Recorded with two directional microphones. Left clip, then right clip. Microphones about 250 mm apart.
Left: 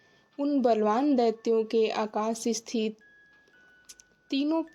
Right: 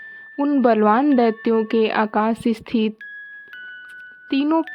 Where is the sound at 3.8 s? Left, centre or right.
Right.